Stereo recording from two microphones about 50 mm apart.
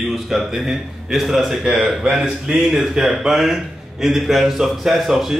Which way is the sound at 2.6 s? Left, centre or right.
Centre.